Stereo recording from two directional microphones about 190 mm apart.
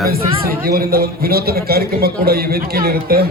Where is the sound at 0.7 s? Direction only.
50° right (ahead or behind).